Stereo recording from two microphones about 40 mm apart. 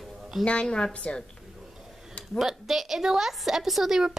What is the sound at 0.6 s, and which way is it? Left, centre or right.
Speech, centre.